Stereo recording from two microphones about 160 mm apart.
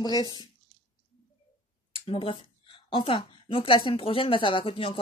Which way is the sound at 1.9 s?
35° left (ahead or behind).